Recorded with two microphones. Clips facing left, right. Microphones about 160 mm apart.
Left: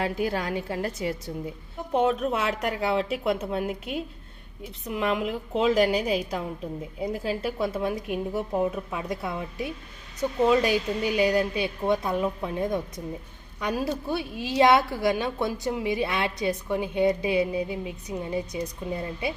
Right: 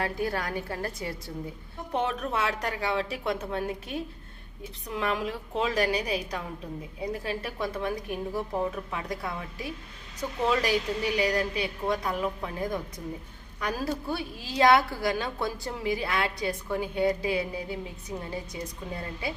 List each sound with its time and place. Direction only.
0.0 s a woman's voice: 20° left (ahead or behind)